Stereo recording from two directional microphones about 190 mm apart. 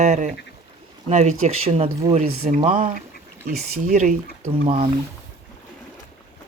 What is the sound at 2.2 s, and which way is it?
Speech, 55° right (ahead or behind).